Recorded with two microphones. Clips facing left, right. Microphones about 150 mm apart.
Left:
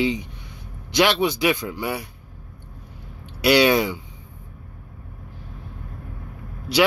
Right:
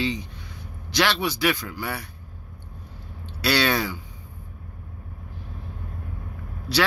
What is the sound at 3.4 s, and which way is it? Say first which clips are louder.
Speech: left 6 dB; 15° left (ahead or behind).